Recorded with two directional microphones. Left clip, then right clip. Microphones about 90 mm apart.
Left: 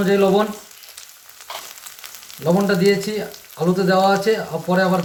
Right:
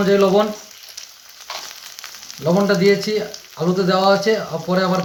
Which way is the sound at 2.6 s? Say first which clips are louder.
Right 4 dB; 20° right (ahead or behind).